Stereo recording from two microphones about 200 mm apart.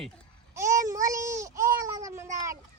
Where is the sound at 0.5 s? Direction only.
15° right (ahead or behind).